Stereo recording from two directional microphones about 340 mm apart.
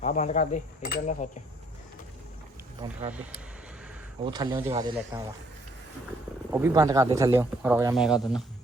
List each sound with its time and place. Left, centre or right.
0.0 s speech: left
4.2 s speech: centre
6.5 s speech: centre